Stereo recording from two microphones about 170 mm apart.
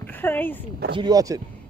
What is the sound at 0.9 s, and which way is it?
Speech, 25° right (ahead or behind).